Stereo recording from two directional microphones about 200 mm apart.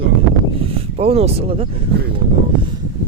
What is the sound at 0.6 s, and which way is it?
Speech, 30° right (ahead or behind).